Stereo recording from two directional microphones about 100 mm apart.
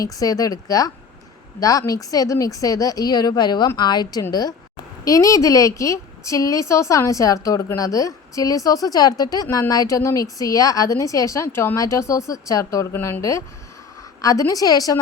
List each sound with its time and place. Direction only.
0.0 s a woman's voice: 35° left (ahead or behind)